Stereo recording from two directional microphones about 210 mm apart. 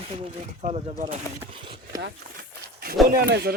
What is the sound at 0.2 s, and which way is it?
Speech, 30° right (ahead or behind).